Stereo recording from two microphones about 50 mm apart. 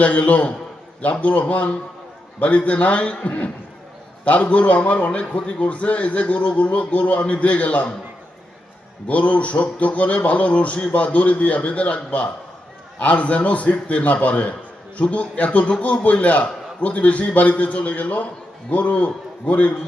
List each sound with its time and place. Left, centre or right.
0.0 s a man's voice: left
9.0 s a man's voice: left